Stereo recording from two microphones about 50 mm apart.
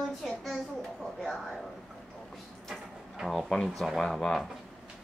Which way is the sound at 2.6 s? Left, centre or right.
Centre.